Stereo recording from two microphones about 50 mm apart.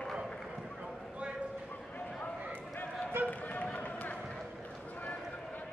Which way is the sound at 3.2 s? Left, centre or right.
Left.